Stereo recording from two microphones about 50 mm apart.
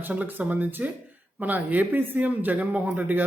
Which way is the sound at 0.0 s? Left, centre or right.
Right.